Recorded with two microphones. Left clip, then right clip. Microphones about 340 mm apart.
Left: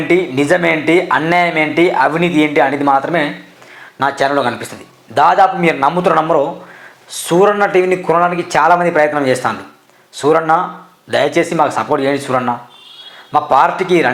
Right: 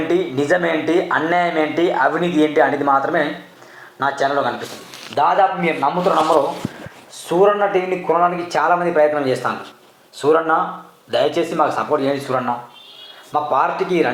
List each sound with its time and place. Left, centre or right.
0.1 s speech: left
5.1 s speech: left
7.1 s speech: left